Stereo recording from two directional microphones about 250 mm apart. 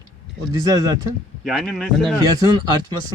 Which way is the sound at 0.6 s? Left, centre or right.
Centre.